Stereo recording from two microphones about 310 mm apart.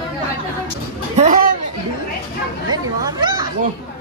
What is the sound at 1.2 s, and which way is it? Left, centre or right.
Speech, right.